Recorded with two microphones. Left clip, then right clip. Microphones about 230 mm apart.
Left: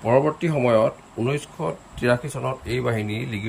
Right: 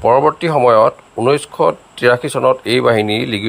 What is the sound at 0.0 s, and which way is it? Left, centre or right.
Speech, right.